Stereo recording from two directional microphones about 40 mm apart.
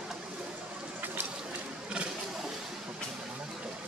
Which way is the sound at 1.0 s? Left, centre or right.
Right.